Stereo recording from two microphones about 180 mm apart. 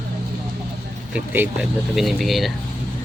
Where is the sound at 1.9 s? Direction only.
Centre (ahead or behind).